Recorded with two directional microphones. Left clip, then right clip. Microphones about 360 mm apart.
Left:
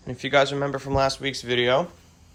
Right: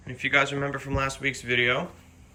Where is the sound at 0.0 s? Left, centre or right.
Centre.